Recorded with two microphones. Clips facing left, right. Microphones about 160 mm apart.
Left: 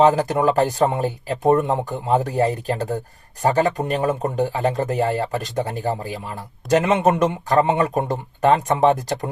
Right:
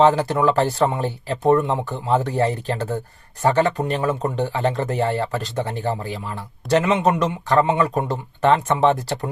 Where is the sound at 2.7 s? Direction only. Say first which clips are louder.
Left 1 dB; 40° left (ahead or behind).